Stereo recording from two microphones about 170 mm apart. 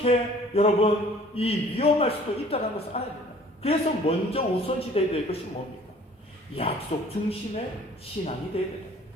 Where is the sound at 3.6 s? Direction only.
35° left (ahead or behind).